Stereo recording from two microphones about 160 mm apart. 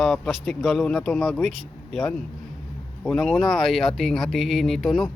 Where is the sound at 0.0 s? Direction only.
5° left (ahead or behind).